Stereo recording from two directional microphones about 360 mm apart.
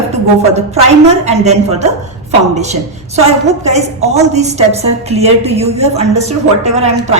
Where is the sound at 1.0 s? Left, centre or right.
Centre.